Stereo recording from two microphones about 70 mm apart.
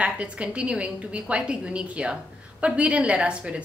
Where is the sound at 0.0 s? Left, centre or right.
Centre.